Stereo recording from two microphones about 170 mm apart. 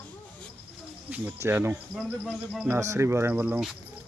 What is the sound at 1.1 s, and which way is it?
Speech, 10° right (ahead or behind).